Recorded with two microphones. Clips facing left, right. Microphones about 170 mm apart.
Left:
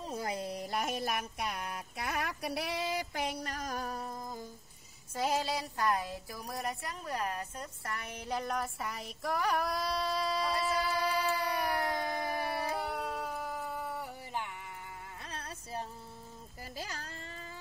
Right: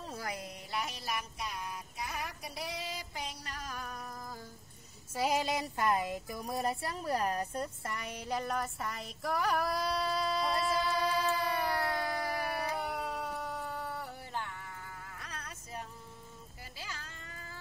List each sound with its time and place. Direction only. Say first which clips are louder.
0.0 s speech: left 4 dB; 20° left (ahead or behind); by 3.4 s 65° left (ahead or behind)
3.4 s a sound: left 5 dB; 45° left (ahead or behind); by 4.5 s 20° left (ahead or behind)
5.1 s speech: right 1 dB; 10° right (ahead or behind); by 7.7 s 35° right (ahead or behind)
7.8 s speech: right 1 dB; 20° right (ahead or behind)
8.3 s child singing: even; centre (ahead or behind); by 12.7 s 25° left (ahead or behind)
12.8 s music: even; centre (ahead or behind)
15.2 s music: left 3 dB; 30° left (ahead or behind)
16.7 s baby cry: left 4 dB; 40° left (ahead or behind)